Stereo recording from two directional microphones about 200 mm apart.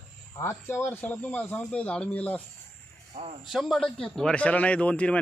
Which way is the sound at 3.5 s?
Centre (ahead or behind).